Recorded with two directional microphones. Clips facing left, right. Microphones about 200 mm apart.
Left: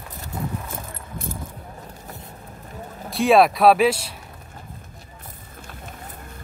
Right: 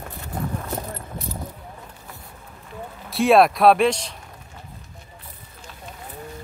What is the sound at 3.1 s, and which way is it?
Speech, centre (ahead or behind).